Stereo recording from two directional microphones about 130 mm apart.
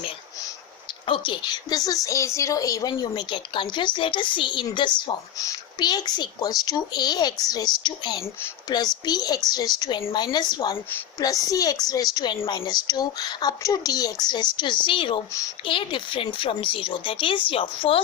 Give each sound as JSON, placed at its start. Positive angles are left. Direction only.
{"t": 1.0, "sound": "a woman's voice", "side_deg": 40}